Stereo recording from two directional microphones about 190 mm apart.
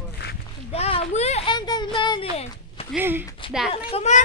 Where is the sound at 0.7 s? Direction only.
30° left (ahead or behind).